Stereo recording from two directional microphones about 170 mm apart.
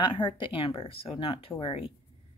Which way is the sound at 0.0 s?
30° left (ahead or behind).